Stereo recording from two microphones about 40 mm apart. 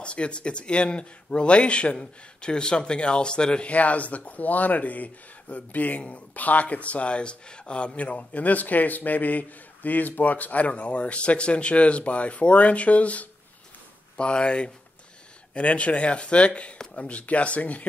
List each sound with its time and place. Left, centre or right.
0.0 s speech: left
3.7 s speech: left
14.1 s speech: left